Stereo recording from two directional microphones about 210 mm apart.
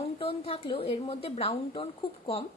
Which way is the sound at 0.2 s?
25° left (ahead or behind).